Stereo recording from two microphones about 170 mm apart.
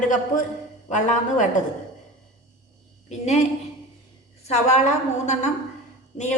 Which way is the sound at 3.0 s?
40° left (ahead or behind).